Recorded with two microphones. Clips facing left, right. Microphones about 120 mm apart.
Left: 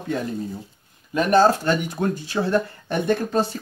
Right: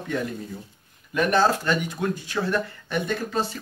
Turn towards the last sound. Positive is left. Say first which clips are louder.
# left 5 dB
turn(degrees=45)  # may be behind; listen again after turning